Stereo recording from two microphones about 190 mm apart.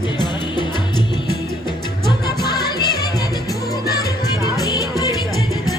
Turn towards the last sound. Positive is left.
turn(degrees=20)  # may be behind; listen again after turning